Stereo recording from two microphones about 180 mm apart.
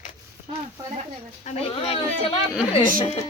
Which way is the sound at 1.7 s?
30° left (ahead or behind).